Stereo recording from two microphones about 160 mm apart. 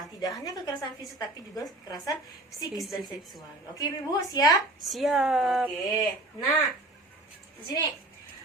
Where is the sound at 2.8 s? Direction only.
Centre (ahead or behind).